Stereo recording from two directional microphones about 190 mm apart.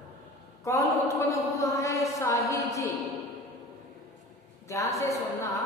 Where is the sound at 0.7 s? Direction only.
15° left (ahead or behind).